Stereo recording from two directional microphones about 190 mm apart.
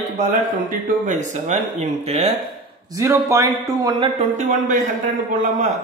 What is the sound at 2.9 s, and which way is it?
Speech, 15° right (ahead or behind).